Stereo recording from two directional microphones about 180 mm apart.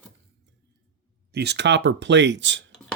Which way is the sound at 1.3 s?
65° right (ahead or behind).